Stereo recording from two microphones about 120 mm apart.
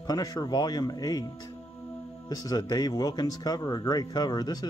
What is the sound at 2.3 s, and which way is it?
Speech, 30° left (ahead or behind).